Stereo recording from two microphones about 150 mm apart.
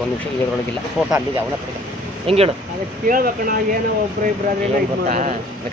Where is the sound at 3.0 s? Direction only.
70° right (ahead or behind).